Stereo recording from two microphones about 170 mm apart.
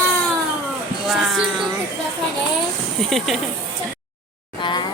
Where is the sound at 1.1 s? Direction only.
Centre (ahead or behind).